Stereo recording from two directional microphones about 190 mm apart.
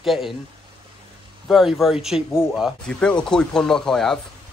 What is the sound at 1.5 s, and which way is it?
Speech, centre (ahead or behind).